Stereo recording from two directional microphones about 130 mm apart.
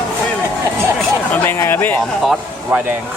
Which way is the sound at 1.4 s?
20° left (ahead or behind).